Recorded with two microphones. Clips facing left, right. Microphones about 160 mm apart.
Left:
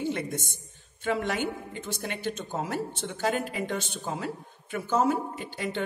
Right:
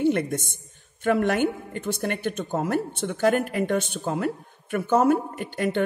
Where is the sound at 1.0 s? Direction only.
55° right (ahead or behind).